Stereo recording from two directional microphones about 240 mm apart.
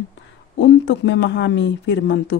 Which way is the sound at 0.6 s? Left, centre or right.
Left.